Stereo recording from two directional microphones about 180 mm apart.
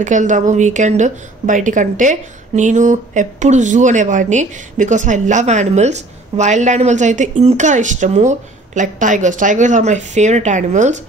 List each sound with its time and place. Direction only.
0.0 s a woman's voice: 45° right (ahead or behind)